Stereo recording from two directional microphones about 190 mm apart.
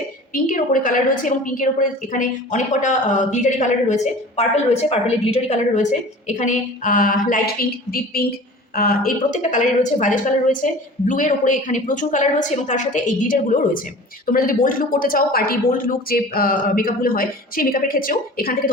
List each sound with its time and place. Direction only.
0.4 s a woman's voice: 45° left (ahead or behind)